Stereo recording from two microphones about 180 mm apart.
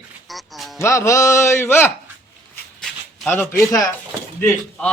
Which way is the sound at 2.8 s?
10° left (ahead or behind).